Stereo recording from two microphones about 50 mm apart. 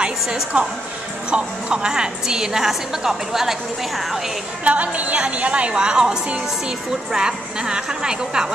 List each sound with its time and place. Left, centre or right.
0.0 s a woman's voice: right; by 4.2 s centre
4.6 s a woman's voice: right